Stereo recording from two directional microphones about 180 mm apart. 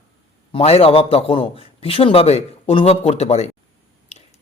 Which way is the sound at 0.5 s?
35° left (ahead or behind).